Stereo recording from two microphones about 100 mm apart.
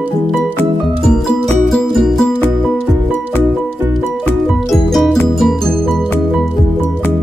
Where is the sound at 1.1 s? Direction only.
5° left (ahead or behind).